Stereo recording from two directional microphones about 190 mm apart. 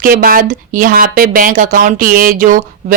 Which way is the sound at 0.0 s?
50° right (ahead or behind).